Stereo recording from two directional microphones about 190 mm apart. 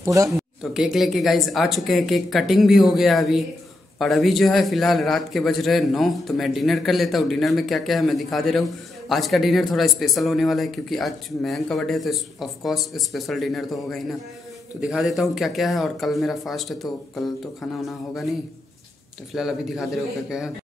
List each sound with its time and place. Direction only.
0.0 s speech: 15° right (ahead or behind)
0.3 s a man's voice: centre (ahead or behind)
19.3 s a man's voice: centre (ahead or behind)